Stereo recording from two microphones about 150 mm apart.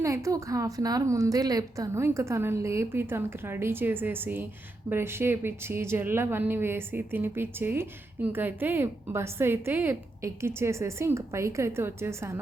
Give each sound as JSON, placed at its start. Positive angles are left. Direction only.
{"t": 0.0, "sound": "a woman's voice", "side_deg": -20}